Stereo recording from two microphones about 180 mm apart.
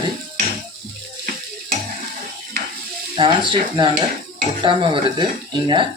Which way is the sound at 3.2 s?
30° right (ahead or behind).